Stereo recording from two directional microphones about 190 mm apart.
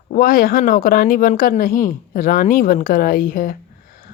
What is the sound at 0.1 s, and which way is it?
Speech, 50° left (ahead or behind).